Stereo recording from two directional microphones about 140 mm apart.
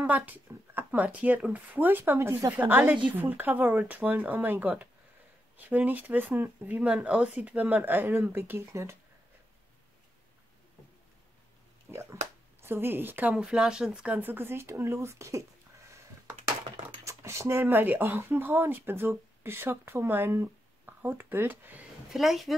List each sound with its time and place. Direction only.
0.0 s speech: 10° right (ahead or behind)
11.9 s speech: 20° right (ahead or behind)
16.7 s speech: 20° right (ahead or behind)
22.1 s speech: centre (ahead or behind)